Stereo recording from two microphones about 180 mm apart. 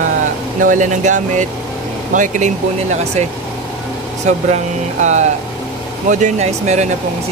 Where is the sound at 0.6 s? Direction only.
45° right (ahead or behind).